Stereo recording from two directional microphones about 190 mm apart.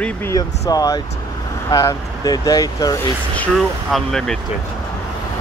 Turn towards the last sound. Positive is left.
turn(degrees=0)  # may be behind; listen again after turning